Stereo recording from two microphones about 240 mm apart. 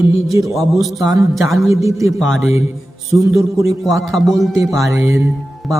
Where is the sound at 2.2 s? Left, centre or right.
Centre.